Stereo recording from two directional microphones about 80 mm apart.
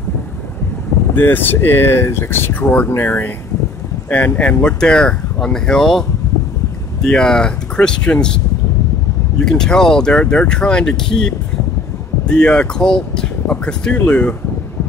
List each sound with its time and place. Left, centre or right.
1.1 s speech: left
9.4 s speech: centre